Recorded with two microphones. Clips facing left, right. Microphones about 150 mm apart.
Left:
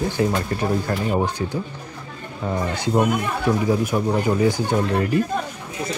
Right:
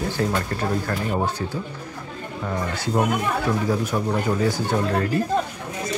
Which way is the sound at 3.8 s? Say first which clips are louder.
Left 3 dB; 15° left (ahead or behind).